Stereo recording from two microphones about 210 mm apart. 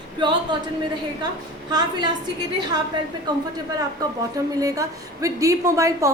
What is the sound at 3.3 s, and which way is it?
Speech, 20° right (ahead or behind).